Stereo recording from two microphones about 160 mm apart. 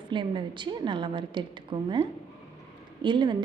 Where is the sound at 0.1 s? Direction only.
30° right (ahead or behind).